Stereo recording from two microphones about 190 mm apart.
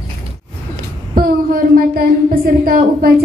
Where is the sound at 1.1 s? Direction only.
50° right (ahead or behind).